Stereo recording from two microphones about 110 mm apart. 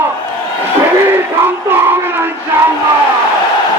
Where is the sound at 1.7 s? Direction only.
20° right (ahead or behind).